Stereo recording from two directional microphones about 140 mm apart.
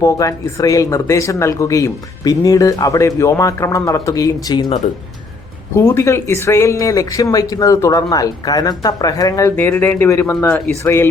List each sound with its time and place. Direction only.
0.0 s speech: 25° left (ahead or behind)
5.7 s speech: 20° left (ahead or behind)
9.6 s speech: 15° left (ahead or behind)